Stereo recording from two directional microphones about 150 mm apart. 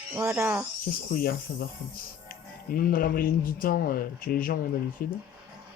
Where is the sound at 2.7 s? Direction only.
70° left (ahead or behind).